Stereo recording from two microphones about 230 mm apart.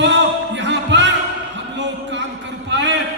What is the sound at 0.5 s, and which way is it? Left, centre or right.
Music, right.